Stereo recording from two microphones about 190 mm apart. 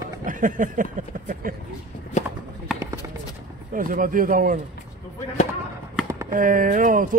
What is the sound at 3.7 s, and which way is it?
Speech, 45° right (ahead or behind).